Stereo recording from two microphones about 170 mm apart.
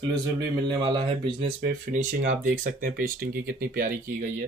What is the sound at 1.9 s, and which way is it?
Speech, 50° right (ahead or behind).